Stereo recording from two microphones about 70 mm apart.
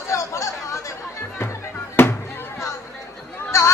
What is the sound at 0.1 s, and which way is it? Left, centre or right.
Chatter, left.